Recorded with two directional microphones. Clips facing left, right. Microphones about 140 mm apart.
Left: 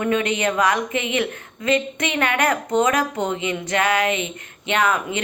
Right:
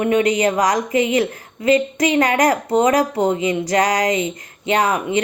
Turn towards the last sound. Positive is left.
turn(degrees=-35)  # may be behind; listen again after turning